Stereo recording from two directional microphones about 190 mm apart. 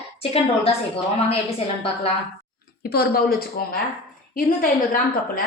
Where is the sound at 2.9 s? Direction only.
55° left (ahead or behind).